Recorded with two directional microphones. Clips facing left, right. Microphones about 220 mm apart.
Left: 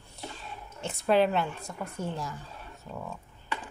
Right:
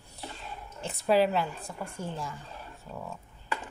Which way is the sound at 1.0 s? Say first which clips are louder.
Even; 5° right (ahead or behind).